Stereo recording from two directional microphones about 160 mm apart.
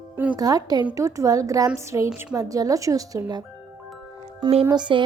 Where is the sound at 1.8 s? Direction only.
20° right (ahead or behind).